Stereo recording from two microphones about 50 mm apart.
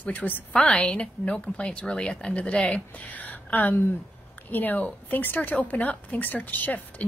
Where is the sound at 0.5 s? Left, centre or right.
Centre.